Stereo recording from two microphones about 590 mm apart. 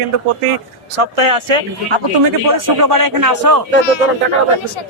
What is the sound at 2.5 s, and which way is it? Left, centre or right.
A man's voice, right.